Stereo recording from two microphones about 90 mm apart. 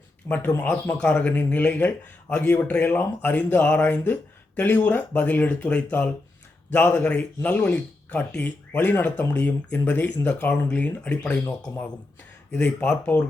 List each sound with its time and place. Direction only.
0.3 s speech: 20° left (ahead or behind)
12.5 s speech: 15° left (ahead or behind)